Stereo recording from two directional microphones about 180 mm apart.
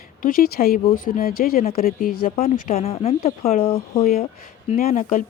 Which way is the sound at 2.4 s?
35° left (ahead or behind).